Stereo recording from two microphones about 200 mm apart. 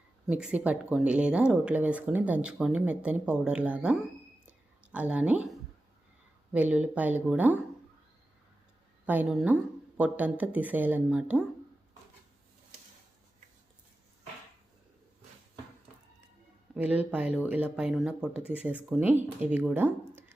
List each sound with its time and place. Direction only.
0.3 s speech: 5° right (ahead or behind)
4.4 s a sound: 5° right (ahead or behind)
6.5 s speech: 5° right (ahead or behind)
9.0 s speech: 5° right (ahead or behind)
16.7 s speech: 10° right (ahead or behind)